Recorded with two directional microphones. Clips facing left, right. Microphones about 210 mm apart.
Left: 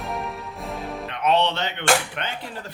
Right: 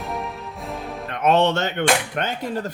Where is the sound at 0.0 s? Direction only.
Centre (ahead or behind).